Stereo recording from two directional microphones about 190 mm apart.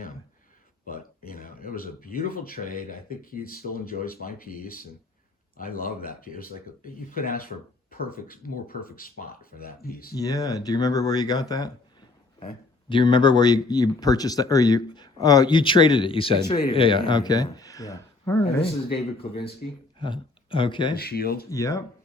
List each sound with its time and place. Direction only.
0.9 s speech: 50° left (ahead or behind)
10.2 s speech: 20° left (ahead or behind)
12.9 s speech: 25° left (ahead or behind)
19.2 s speech: 30° left (ahead or behind)
20.9 s speech: 55° left (ahead or behind)
21.5 s speech: 15° left (ahead or behind)